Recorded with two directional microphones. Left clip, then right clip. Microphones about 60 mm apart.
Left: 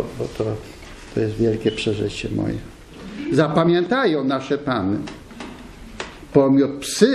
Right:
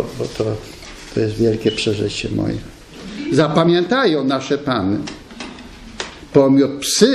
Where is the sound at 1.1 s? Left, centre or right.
Centre.